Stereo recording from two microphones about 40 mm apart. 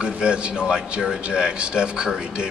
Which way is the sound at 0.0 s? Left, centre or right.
Right.